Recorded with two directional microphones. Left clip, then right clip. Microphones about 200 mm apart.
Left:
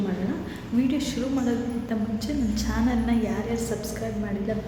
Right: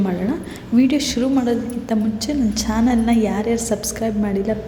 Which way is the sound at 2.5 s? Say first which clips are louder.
Right 7 dB; 40° right (ahead or behind).